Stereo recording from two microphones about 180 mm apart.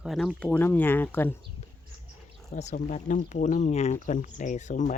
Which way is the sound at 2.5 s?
40° left (ahead or behind).